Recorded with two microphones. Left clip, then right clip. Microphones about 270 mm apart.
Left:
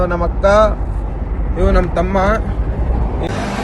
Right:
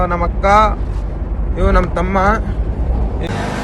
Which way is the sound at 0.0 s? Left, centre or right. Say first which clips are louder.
Left 1 dB; centre.